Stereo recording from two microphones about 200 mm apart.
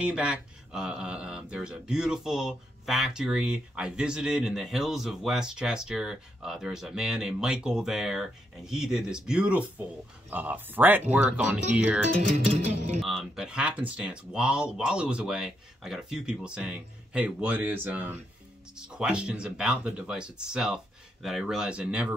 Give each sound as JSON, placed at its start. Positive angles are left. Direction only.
{"t": 0.0, "sound": "speech", "side_deg": -5}
{"t": 12.2, "sound": "music", "side_deg": -35}
{"t": 13.0, "sound": "speech", "side_deg": 0}